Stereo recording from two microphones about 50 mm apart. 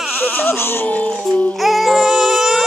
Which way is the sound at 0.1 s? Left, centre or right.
Left.